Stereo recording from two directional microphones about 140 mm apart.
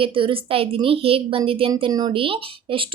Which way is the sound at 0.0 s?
40° right (ahead or behind).